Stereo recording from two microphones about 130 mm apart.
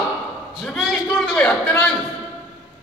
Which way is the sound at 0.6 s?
Centre (ahead or behind).